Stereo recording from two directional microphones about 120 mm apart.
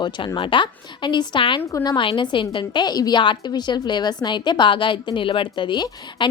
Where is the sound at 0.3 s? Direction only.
45° left (ahead or behind).